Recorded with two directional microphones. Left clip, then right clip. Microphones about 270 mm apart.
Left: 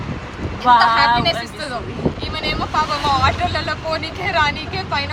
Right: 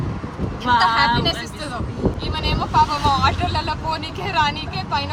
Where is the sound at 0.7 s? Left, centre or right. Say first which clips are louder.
Left 4 dB; centre.